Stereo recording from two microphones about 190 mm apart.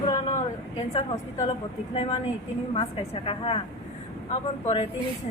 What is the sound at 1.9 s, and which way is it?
A woman's voice, 30° left (ahead or behind).